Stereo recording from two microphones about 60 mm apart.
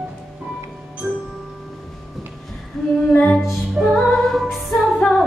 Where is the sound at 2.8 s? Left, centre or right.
Centre.